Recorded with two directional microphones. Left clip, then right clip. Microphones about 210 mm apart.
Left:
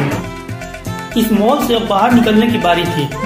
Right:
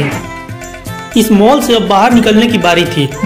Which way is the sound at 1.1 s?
50° right (ahead or behind).